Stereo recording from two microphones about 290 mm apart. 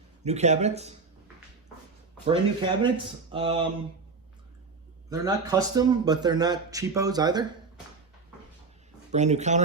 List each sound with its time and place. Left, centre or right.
0.3 s speech: right
2.2 s speech: centre
5.0 s speech: centre
9.1 s speech: right